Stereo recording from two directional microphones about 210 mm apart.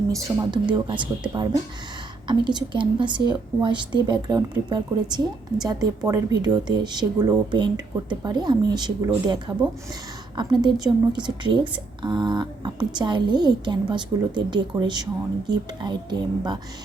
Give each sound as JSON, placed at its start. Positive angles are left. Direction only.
{"t": 0.1, "sound": "a woman's voice", "side_deg": -20}